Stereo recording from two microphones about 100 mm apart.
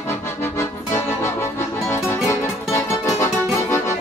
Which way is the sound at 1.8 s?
25° left (ahead or behind).